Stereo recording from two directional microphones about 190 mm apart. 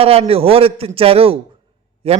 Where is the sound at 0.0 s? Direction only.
30° right (ahead or behind).